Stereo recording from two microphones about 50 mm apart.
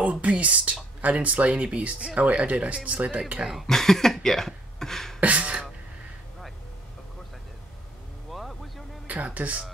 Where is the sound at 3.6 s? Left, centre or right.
Centre.